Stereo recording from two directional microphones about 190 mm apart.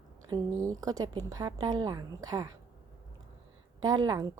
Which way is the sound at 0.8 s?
20° right (ahead or behind).